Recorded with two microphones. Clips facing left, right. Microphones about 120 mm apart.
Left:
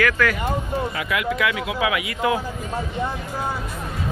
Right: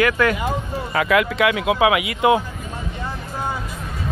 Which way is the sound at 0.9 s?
90° right.